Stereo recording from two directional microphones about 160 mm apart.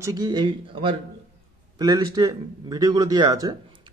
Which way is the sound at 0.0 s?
25° right (ahead or behind).